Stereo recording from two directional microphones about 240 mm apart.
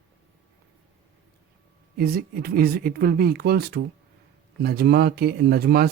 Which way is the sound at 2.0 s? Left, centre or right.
Right.